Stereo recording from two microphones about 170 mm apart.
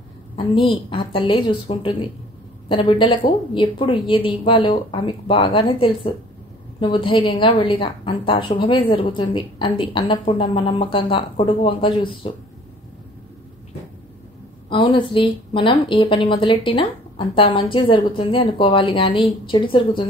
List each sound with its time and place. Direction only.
0.4 s a woman's voice: 30° left (ahead or behind)
14.7 s a woman's voice: 30° left (ahead or behind)